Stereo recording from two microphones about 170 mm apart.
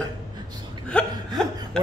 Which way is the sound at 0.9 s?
5° left (ahead or behind).